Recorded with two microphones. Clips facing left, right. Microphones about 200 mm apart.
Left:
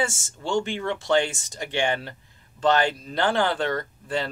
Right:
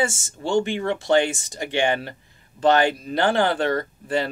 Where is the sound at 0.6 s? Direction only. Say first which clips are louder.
Right 4 dB; 15° right (ahead or behind).